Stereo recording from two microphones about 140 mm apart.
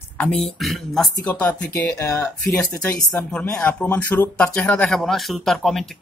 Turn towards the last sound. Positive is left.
turn(degrees=0)  # may be behind; listen again after turning